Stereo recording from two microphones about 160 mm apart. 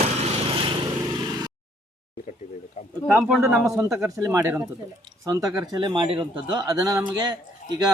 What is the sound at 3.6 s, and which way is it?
Speech, 20° right (ahead or behind).